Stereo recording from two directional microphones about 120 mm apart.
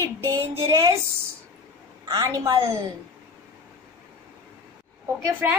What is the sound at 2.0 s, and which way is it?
Speech, 30° right (ahead or behind).